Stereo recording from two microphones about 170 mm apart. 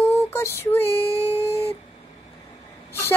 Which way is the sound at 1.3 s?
35° left (ahead or behind).